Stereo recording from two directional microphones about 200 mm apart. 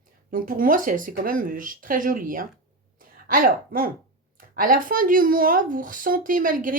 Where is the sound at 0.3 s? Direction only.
45° right (ahead or behind).